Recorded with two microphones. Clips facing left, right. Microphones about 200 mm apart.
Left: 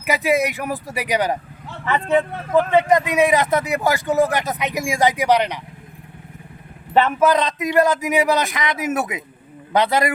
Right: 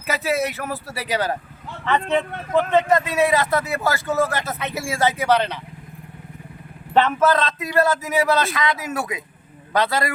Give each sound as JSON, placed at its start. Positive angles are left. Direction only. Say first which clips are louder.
{"t": 0.0, "sound": "a man's voice", "louder": "left 4 dB", "side_deg": 15}
{"t": 6.9, "sound": "a man's voice", "louder": "left 1 dB", "side_deg": 10}